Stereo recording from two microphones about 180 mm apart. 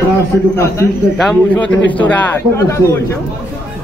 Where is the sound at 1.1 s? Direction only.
5° left (ahead or behind).